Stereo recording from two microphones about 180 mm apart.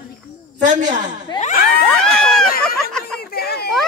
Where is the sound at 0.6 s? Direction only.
45° right (ahead or behind).